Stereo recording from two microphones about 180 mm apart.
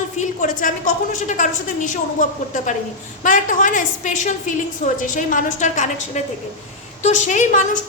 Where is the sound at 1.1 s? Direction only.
45° left (ahead or behind).